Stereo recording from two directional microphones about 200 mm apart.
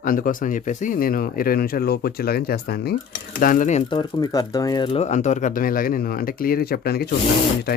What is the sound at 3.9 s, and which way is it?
Speech, 20° left (ahead or behind).